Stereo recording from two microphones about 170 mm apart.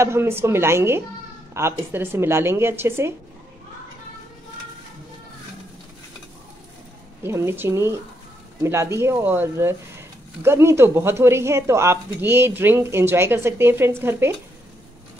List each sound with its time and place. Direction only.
0.0 s speech: 15° right (ahead or behind)
7.2 s speech: 15° right (ahead or behind)